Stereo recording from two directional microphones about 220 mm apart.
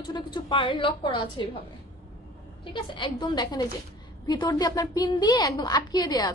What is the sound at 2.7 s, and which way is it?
A woman's voice, 20° left (ahead or behind).